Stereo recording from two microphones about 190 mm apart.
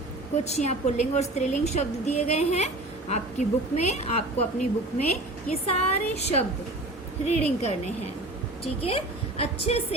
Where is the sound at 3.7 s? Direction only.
35° left (ahead or behind).